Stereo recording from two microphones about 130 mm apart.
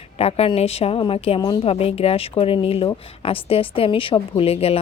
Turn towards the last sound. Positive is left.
turn(degrees=50)  # may be behind; listen again after turning